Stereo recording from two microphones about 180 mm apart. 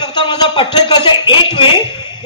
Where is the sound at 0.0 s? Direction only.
25° left (ahead or behind).